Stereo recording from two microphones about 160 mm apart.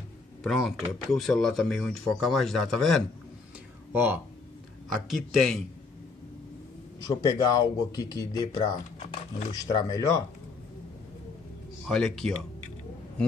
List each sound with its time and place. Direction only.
0.4 s speech: centre (ahead or behind)
3.9 s speech: 10° right (ahead or behind)
5.0 s speech: centre (ahead or behind)
7.1 s speech: 25° left (ahead or behind)
11.9 s speech: 5° left (ahead or behind)